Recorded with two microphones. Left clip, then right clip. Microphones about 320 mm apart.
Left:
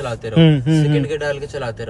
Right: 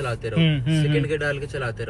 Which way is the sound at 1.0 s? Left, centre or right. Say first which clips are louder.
Left 3 dB; centre.